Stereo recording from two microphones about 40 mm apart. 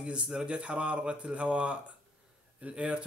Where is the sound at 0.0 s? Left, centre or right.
Right.